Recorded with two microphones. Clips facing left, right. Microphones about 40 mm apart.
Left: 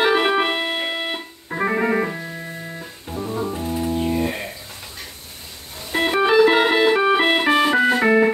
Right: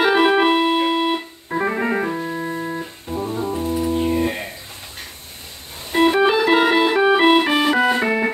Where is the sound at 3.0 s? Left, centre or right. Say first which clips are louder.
Right 2 dB; right.